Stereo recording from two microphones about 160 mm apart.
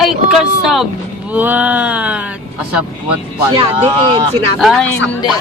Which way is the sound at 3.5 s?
35° right (ahead or behind).